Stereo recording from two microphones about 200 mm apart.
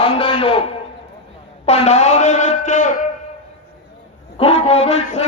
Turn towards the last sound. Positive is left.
turn(degrees=35)  # may be behind; listen again after turning